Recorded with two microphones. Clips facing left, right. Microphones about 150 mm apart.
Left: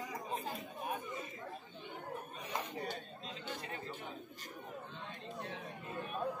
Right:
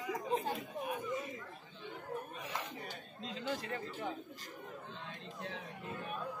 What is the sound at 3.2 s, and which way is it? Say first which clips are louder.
Chatter: right 8 dB; 90° right.